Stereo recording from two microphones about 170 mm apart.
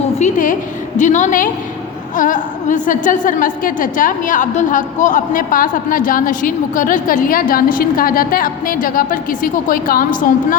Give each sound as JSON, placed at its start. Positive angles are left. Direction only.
{"t": 0.2, "sound": "a woman's voice", "side_deg": 50}